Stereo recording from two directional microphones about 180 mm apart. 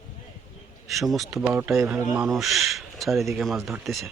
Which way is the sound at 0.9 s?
Centre (ahead or behind).